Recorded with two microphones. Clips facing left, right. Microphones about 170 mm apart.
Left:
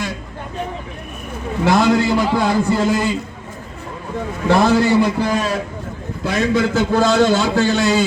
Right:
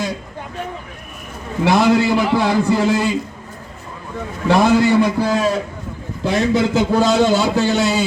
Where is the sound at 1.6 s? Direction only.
10° right (ahead or behind).